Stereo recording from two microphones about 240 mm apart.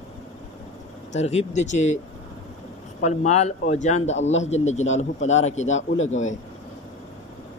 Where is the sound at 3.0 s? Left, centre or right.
Left.